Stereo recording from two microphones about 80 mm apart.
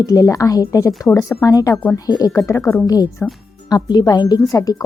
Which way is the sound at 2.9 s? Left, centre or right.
Left.